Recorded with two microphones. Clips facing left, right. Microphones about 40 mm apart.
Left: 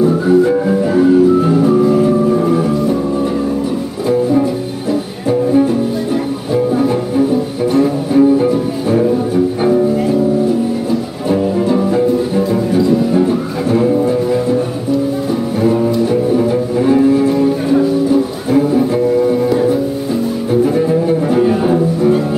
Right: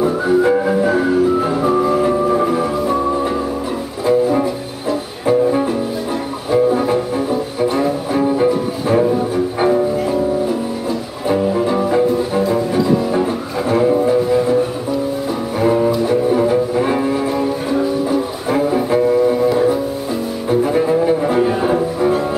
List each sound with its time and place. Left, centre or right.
0.0 s music: centre
0.8 s music: centre
5.2 s music: centre
10.9 s music: centre
15.6 s music: centre
16.3 s cello: centre
18.5 s music: centre
19.5 s music: centre
20.6 s cello: centre